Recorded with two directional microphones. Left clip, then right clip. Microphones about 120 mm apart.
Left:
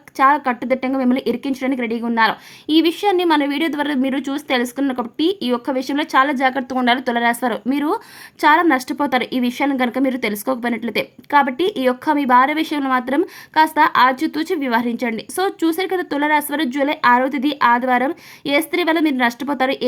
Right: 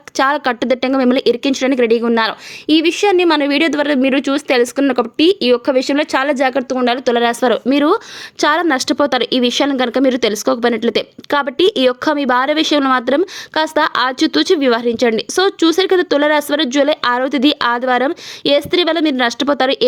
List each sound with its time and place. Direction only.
0.2 s a woman's voice: 30° right (ahead or behind)
6.6 s a woman's voice: 5° right (ahead or behind)
6.8 s a woman's voice: 15° right (ahead or behind)